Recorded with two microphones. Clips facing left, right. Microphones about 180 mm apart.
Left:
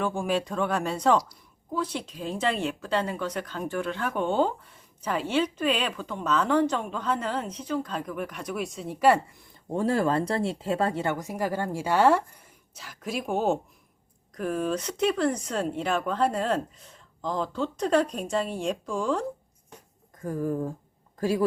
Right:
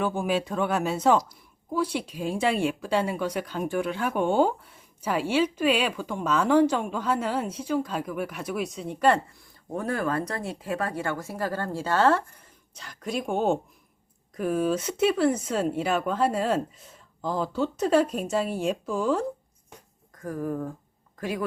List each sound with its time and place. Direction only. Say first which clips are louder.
0.0 s speech: right 1 dB; 5° right (ahead or behind)
9.4 s speech: left 4 dB; 25° left (ahead or behind); by 19.2 s 5° right (ahead or behind)
20.2 s a woman's voice: left 2 dB; 25° left (ahead or behind)